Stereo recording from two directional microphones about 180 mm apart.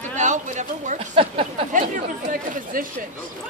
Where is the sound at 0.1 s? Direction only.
40° right (ahead or behind).